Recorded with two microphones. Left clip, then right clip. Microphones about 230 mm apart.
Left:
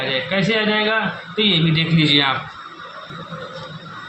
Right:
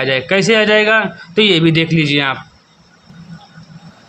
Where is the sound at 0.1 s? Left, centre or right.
Right.